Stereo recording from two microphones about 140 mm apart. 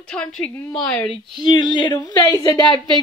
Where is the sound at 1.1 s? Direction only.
30° left (ahead or behind).